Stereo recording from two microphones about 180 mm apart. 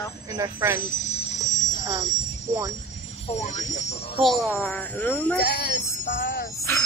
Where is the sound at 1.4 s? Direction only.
45° left (ahead or behind).